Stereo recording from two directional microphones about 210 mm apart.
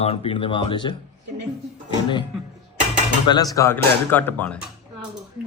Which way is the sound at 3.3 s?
20° left (ahead or behind).